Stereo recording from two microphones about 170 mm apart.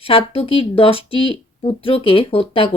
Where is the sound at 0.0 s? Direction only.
30° left (ahead or behind).